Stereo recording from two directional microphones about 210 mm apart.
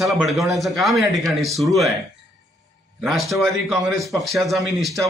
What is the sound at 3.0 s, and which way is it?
Speech, centre (ahead or behind).